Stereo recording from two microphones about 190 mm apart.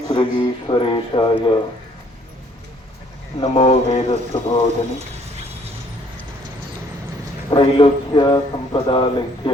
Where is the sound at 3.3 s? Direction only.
30° left (ahead or behind).